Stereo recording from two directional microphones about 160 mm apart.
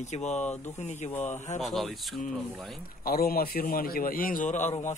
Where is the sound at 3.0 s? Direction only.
70° left (ahead or behind); by 4.9 s 50° left (ahead or behind).